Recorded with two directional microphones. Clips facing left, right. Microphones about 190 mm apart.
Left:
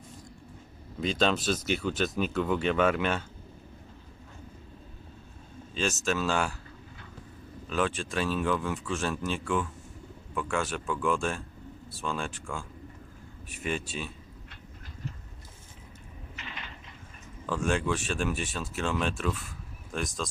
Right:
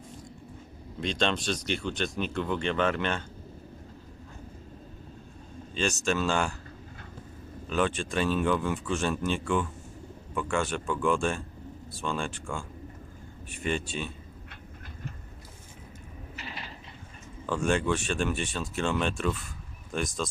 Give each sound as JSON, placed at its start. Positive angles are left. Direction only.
{"t": 1.0, "sound": "speech", "side_deg": 5}
{"t": 5.7, "sound": "speech", "side_deg": 0}
{"t": 7.7, "sound": "speech", "side_deg": 0}
{"t": 16.3, "sound": "a sound", "side_deg": -40}
{"t": 17.4, "sound": "speech", "side_deg": 0}